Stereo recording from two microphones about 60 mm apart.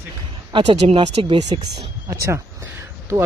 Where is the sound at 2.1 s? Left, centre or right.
Right.